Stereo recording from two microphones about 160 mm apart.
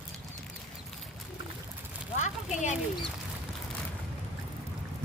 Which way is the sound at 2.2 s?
50° left (ahead or behind).